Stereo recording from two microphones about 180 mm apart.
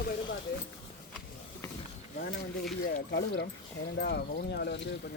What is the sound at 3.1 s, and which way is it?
Speech, 80° left.